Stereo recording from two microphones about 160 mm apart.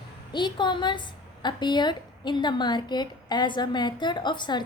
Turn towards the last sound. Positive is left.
turn(degrees=30)  # may be behind; listen again after turning